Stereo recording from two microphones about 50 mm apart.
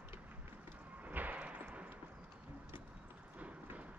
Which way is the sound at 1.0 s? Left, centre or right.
Right.